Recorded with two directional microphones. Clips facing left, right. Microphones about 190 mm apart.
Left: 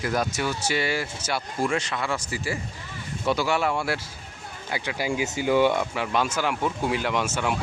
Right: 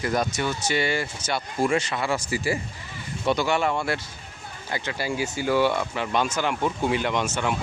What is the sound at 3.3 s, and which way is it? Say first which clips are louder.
Speech: right 1 dB; 5° left (ahead or behind).